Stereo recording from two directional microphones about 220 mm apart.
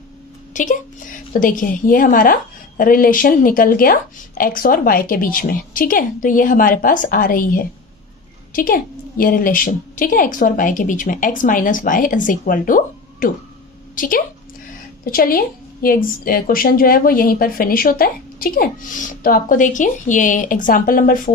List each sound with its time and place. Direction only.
0.5 s a woman's voice: 35° left (ahead or behind)